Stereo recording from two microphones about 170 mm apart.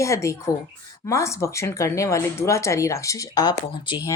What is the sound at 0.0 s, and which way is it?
Speech, 20° left (ahead or behind).